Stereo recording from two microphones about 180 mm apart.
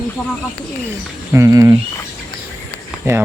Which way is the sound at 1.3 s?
15° right (ahead or behind).